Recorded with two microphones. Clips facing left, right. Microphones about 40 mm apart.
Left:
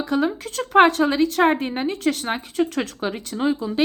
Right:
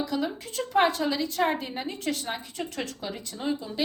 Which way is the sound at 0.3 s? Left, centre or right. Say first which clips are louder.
Left 6 dB; left.